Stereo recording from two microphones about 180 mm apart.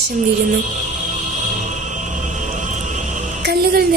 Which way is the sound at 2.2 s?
45° right (ahead or behind).